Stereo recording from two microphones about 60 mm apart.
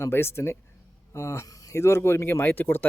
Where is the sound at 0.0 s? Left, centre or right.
Left.